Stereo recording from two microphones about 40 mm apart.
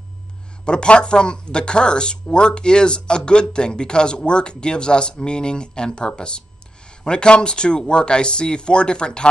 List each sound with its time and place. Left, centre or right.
0.7 s speech: left